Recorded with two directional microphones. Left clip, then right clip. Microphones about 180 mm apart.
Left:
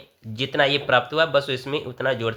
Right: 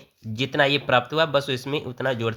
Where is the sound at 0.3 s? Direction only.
30° right (ahead or behind).